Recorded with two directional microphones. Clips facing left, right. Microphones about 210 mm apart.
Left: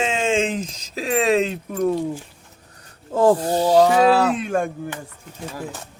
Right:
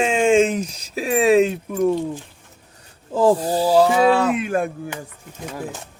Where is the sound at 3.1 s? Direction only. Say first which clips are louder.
Even; 5° right (ahead or behind).